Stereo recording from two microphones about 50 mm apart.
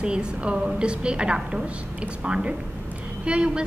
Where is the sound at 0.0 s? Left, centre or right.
Centre.